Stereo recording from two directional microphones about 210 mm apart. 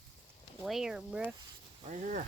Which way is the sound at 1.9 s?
40° right (ahead or behind).